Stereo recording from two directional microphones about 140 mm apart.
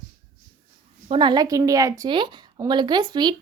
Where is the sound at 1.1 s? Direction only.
30° right (ahead or behind).